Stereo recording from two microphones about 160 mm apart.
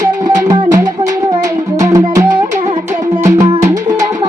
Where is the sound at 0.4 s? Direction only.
20° right (ahead or behind).